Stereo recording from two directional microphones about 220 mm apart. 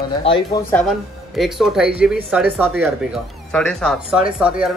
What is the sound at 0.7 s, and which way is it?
Speech, centre (ahead or behind).